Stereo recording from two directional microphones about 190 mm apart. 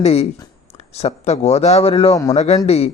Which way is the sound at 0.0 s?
35° left (ahead or behind).